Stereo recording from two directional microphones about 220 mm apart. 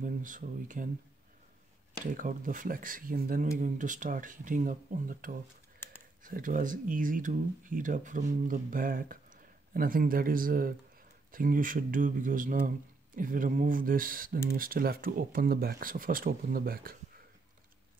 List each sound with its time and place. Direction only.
0.0 s speech: 35° right (ahead or behind)
2.2 s speech: 35° right (ahead or behind)